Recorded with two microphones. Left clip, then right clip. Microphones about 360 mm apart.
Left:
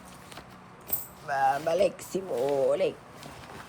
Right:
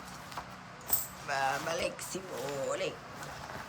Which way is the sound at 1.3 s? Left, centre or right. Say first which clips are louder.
Left 7 dB; centre.